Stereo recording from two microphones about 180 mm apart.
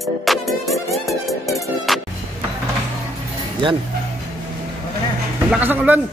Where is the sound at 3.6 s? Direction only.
25° right (ahead or behind).